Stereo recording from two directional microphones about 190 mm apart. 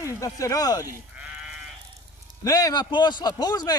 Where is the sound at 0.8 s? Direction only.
5° right (ahead or behind).